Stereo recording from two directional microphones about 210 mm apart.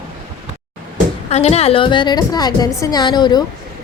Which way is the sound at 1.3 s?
30° left (ahead or behind).